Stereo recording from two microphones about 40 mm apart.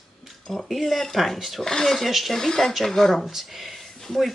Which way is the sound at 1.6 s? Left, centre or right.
Centre.